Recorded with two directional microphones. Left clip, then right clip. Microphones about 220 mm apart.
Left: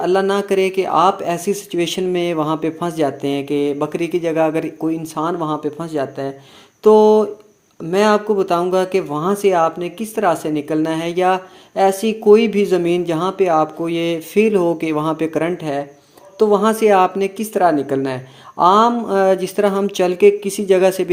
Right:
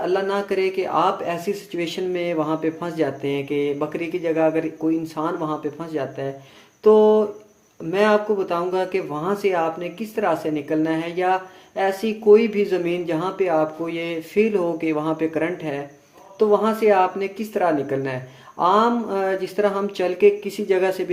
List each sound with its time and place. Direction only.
0.0 s speech: 45° left (ahead or behind)